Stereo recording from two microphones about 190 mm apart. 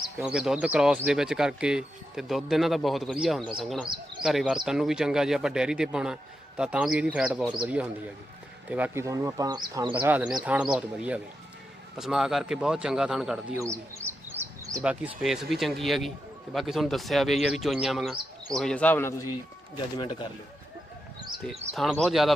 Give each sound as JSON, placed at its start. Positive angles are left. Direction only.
{"t": 0.2, "sound": "speech", "side_deg": -5}
{"t": 9.9, "sound": "speech", "side_deg": -10}
{"t": 13.6, "sound": "bird", "side_deg": -15}
{"t": 14.8, "sound": "a man's voice", "side_deg": -5}
{"t": 21.5, "sound": "speech", "side_deg": -35}
{"t": 21.8, "sound": "speech", "side_deg": 0}